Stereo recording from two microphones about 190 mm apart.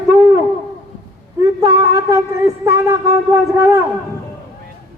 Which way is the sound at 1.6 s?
15° right (ahead or behind).